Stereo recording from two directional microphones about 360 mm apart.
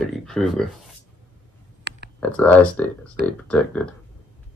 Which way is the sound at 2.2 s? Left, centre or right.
Centre.